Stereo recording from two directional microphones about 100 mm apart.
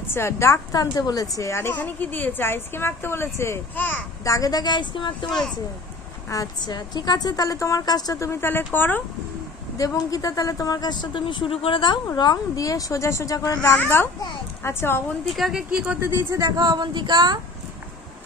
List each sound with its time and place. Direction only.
0.1 s a woman's voice: 25° left (ahead or behind)
4.2 s speech: 35° left (ahead or behind); by 5.4 s 50° left (ahead or behind)
6.3 s a woman's voice: 40° left (ahead or behind); by 9.0 s 20° left (ahead or behind)
9.8 s speech: 35° left (ahead or behind); by 12.0 s 55° left (ahead or behind)
12.2 s a woman's voice: 40° left (ahead or behind); by 15.0 s 25° left (ahead or behind)
15.3 s speech: centre (ahead or behind)
15.9 s a woman's voice: 20° right (ahead or behind); by 17.4 s 45° right (ahead or behind)